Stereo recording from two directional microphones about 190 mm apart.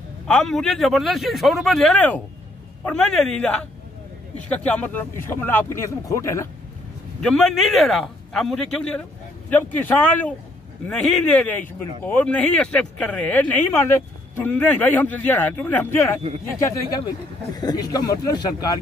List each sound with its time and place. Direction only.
0.3 s speech: 5° left (ahead or behind)
4.5 s speech: 5° left (ahead or behind)
7.2 s speech: 5° left (ahead or behind); by 18.5 s 20° left (ahead or behind)